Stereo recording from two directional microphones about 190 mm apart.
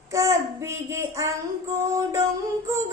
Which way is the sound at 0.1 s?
15° right (ahead or behind).